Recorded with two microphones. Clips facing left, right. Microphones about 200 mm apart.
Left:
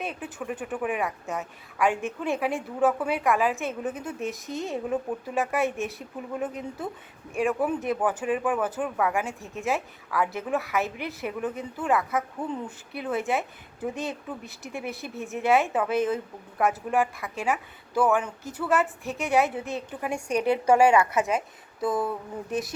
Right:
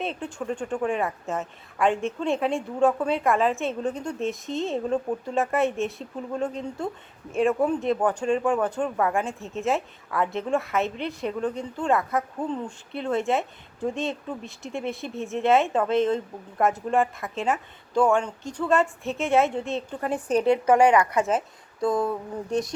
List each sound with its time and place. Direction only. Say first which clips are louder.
0.0 s speech: right 3 dB; 5° left (ahead or behind)
3.8 s speech: right 3 dB; 20° left (ahead or behind)
4.0 s speech: right 3 dB; centre (ahead or behind)
5.7 s a woman's voice: right 3 dB; 15° left (ahead or behind)
6.5 s a woman's voice: right 3 dB; 5° left (ahead or behind)